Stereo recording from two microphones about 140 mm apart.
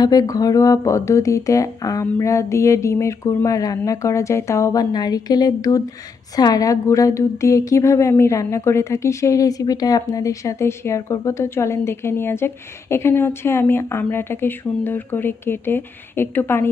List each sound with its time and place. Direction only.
0.0 s a woman's voice: 25° left (ahead or behind)